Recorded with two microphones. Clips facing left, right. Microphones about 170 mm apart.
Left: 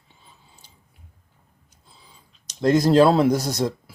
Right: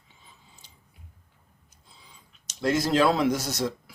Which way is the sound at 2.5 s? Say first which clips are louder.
Left 7 dB; 40° left (ahead or behind).